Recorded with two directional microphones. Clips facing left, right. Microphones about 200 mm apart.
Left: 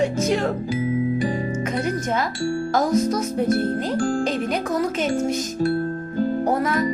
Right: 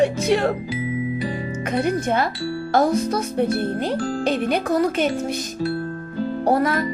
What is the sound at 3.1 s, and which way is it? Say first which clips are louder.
Speech: even; 30° right (ahead or behind).